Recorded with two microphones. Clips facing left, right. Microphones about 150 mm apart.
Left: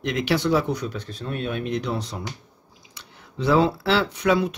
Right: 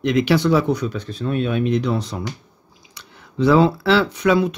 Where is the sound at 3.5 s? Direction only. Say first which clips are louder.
Right 4 dB; 90° right.